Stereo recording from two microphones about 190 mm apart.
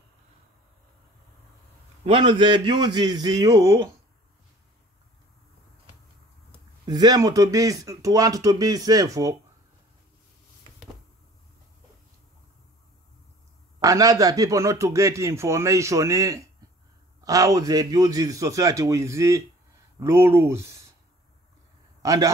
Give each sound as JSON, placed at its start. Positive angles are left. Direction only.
{"t": 2.0, "sound": "a man's voice", "side_deg": -25}
{"t": 6.9, "sound": "a man's voice", "side_deg": -20}
{"t": 13.7, "sound": "a man's voice", "side_deg": -20}
{"t": 22.0, "sound": "a man's voice", "side_deg": -15}